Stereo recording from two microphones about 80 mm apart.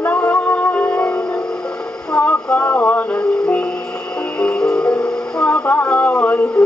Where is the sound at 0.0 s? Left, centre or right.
Left.